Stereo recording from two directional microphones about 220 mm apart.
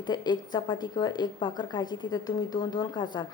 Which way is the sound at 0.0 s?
20° left (ahead or behind).